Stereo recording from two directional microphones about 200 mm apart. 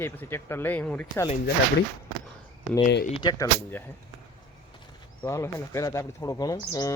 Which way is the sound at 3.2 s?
20° left (ahead or behind).